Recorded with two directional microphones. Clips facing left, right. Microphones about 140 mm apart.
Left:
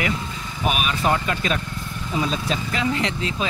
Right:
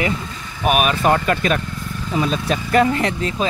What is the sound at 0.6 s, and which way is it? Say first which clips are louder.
Speech: right 6 dB; 55° right (ahead or behind).